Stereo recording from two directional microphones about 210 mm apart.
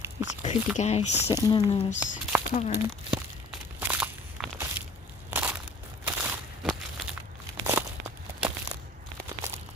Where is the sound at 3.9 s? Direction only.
5° right (ahead or behind).